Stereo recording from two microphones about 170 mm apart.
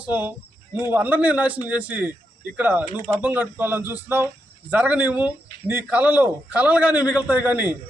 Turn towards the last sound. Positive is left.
turn(degrees=-10)  # may be behind; listen again after turning